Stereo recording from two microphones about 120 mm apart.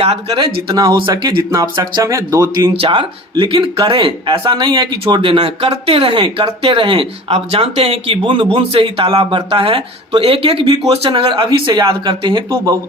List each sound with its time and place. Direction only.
0.0 s speech: 55° right (ahead or behind)
0.3 s speech: 30° right (ahead or behind)
1.4 s speech: 25° right (ahead or behind)
2.7 s speech: 45° right (ahead or behind)